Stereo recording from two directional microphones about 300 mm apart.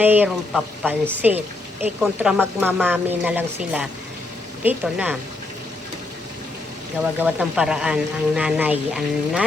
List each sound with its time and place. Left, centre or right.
0.0 s speech: centre
7.2 s speech: centre